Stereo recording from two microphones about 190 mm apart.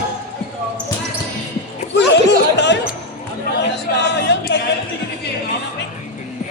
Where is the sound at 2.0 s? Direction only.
65° left (ahead or behind).